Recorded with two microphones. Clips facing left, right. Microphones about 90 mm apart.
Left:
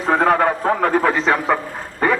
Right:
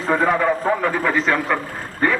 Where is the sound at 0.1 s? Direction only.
65° left (ahead or behind).